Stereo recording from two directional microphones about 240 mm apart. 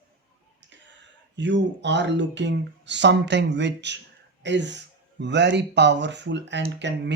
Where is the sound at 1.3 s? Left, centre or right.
Right.